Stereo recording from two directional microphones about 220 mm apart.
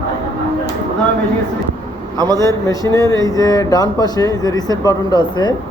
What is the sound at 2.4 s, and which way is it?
Speech, 15° left (ahead or behind).